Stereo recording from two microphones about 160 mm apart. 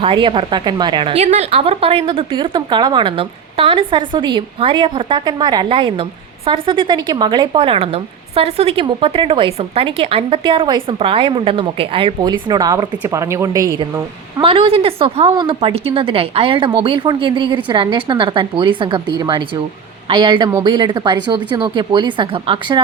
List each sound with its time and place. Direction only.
0.0 s a woman's voice: 30° right (ahead or behind)